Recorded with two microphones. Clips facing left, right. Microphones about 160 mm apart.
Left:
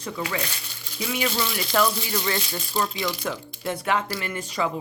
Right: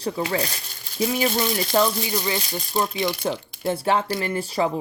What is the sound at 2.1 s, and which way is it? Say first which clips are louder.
Speech: right 1 dB; 15° right (ahead or behind).